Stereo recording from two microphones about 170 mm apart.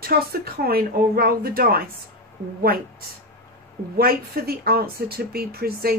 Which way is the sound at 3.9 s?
65° right (ahead or behind).